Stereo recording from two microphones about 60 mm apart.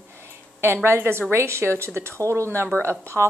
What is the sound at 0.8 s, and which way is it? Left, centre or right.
A woman's voice, right.